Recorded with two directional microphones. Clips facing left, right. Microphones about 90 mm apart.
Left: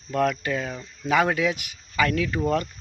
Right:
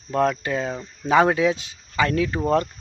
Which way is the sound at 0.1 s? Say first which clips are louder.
Right 2 dB; 25° right (ahead or behind).